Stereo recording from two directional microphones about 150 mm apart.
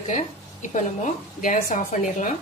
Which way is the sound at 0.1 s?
55° left (ahead or behind).